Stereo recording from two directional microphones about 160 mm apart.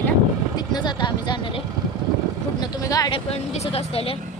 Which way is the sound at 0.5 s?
25° left (ahead or behind).